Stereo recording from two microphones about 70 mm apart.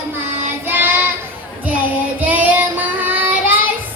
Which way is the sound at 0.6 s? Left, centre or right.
Right.